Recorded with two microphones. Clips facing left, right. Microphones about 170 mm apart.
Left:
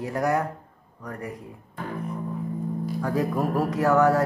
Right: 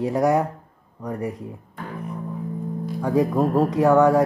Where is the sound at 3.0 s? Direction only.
15° right (ahead or behind).